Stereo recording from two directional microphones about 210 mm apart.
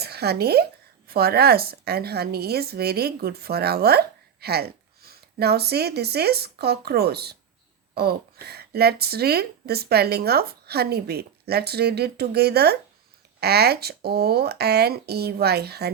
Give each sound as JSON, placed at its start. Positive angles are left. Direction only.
{"t": 0.0, "sound": "speech", "side_deg": -50}